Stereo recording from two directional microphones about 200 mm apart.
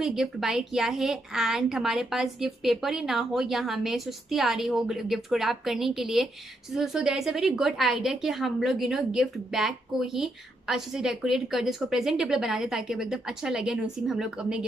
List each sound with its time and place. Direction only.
0.0 s a woman's voice: centre (ahead or behind)